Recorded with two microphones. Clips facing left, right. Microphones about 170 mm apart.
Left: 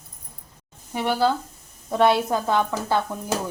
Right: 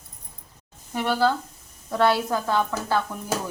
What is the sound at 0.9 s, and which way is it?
A woman's voice, 15° left (ahead or behind).